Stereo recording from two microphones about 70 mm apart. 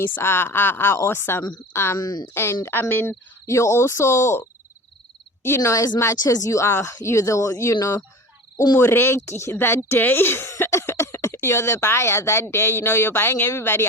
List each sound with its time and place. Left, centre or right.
0.0 s speech: left
2.0 s speech: left
2.3 s speech: left
3.4 s speech: left
8.8 s speech: left